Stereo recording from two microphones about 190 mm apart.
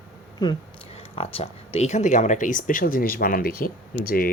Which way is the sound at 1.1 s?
30° left (ahead or behind).